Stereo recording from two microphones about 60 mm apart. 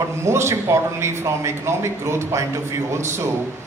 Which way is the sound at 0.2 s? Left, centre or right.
Right.